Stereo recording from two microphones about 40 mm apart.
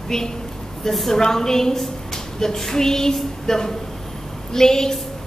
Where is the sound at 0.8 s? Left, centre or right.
Centre.